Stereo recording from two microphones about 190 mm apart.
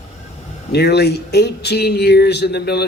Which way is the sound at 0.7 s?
60° left (ahead or behind).